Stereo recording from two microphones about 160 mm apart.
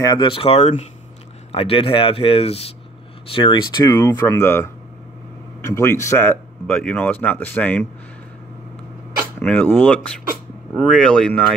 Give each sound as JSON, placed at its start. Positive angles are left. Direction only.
{"t": 0.0, "sound": "speech", "side_deg": 25}
{"t": 5.7, "sound": "speech", "side_deg": 15}
{"t": 9.4, "sound": "speech", "side_deg": 5}